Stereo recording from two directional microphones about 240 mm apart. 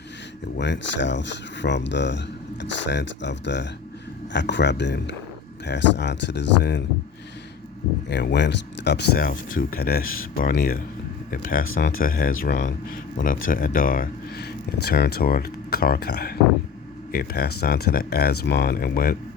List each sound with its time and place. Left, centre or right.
0.6 s speech: left
8.1 s speech: left